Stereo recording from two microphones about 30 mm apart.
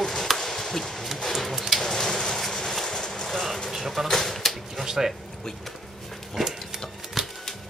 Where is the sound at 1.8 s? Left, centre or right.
Centre.